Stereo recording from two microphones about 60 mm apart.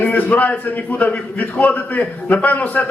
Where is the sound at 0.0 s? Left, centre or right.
Left.